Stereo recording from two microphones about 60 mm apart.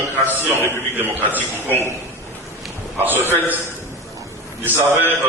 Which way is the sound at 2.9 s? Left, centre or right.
Right.